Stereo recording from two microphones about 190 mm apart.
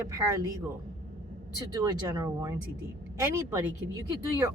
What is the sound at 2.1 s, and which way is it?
A woman's voice, 15° right (ahead or behind).